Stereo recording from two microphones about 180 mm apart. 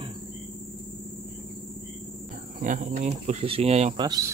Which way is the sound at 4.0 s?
20° right (ahead or behind).